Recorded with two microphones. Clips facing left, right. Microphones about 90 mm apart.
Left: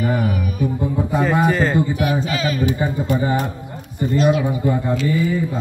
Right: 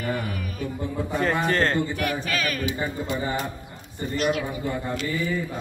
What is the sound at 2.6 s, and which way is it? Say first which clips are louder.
Speech: left 7 dB; 45° left (ahead or behind).